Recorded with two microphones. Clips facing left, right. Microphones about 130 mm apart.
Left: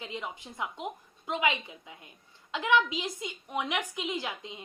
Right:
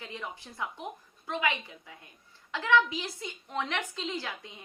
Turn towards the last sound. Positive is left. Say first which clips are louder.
# left 2 dB
turn(degrees=20)  # may be behind; listen again after turning